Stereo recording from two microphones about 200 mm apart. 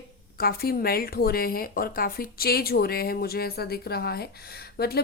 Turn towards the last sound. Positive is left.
turn(degrees=50)  # may be behind; listen again after turning